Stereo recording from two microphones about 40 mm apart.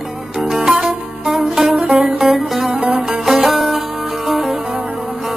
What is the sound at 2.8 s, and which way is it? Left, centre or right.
Music, centre.